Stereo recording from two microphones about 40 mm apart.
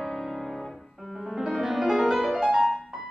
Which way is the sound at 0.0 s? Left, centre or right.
Centre.